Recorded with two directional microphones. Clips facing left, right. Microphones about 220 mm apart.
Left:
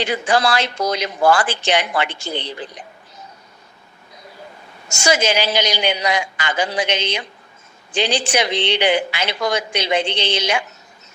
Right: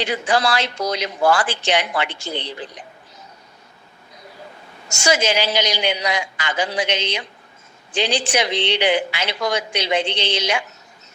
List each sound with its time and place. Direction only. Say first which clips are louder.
0.0 s a woman's voice: left 2 dB; 50° left (ahead or behind)
4.9 s a woman's voice: left 1 dB; 50° left (ahead or behind)